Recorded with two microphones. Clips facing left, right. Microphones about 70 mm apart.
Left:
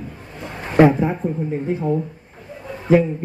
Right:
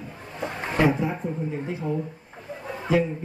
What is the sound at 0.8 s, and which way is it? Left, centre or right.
Speech, left.